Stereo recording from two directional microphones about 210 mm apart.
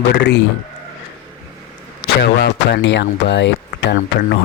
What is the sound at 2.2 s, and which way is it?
Speech, 55° left (ahead or behind).